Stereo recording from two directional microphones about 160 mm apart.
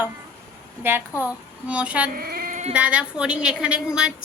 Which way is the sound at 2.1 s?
65° right (ahead or behind).